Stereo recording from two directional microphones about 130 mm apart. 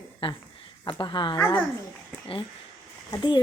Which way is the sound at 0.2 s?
45° left (ahead or behind).